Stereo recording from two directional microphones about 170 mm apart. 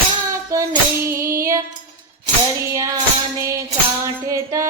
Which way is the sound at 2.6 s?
20° right (ahead or behind).